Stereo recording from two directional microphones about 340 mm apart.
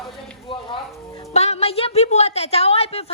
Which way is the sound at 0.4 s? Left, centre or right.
Centre.